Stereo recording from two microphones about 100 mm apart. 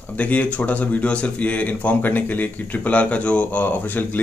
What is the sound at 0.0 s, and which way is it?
Speech, 15° left (ahead or behind).